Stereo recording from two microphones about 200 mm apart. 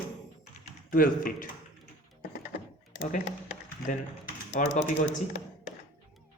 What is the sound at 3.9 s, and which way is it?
Speech, 40° left (ahead or behind).